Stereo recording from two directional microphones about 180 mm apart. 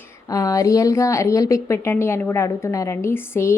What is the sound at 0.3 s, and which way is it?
A woman's voice, 20° left (ahead or behind).